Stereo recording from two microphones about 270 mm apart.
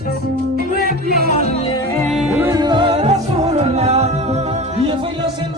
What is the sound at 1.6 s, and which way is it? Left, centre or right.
Music, centre.